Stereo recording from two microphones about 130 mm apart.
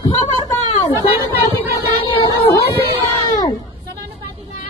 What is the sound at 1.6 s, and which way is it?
Child singing, 45° left (ahead or behind).